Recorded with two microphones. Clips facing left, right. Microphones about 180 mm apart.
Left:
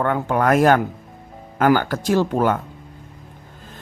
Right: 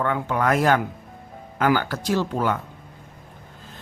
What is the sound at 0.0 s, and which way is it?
Speech, 45° left (ahead or behind).